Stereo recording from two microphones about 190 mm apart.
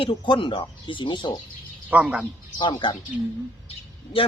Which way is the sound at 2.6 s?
25° left (ahead or behind).